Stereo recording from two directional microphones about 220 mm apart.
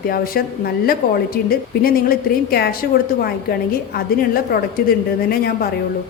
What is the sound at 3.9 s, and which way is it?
A woman's voice, 45° left (ahead or behind).